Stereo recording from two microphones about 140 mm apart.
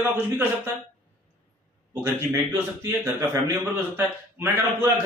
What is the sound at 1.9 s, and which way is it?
A man's voice, 15° right (ahead or behind).